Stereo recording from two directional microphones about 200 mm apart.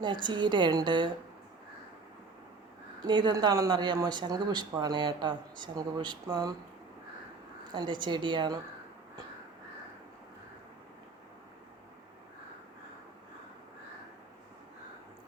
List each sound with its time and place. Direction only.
0.0 s speech: 20° right (ahead or behind)
3.1 s speech: 20° right (ahead or behind)
7.7 s speech: 20° right (ahead or behind)